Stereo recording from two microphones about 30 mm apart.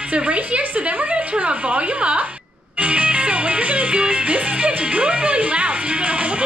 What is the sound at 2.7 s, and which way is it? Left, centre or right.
Music, right.